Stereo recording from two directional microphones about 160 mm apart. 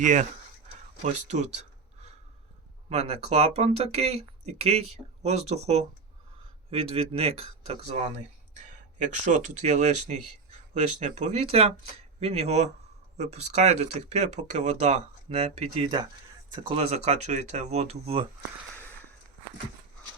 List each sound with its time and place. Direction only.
0.0 s speech: 50° right (ahead or behind)
1.0 s a sound: 45° right (ahead or behind)
2.9 s speech: 40° right (ahead or behind)